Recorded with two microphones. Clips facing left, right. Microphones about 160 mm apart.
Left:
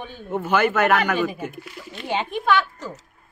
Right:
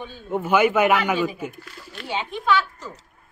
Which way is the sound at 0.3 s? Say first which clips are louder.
Right 2 dB; 10° right (ahead or behind).